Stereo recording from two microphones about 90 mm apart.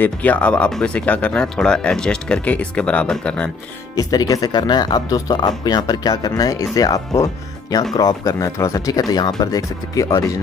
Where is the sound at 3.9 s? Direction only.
45° left (ahead or behind).